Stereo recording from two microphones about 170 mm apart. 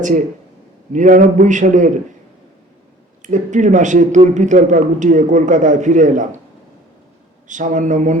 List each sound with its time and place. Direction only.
0.9 s a man's voice: 50° right (ahead or behind)
3.2 s a man's voice: 45° right (ahead or behind)
7.4 s a man's voice: 50° right (ahead or behind)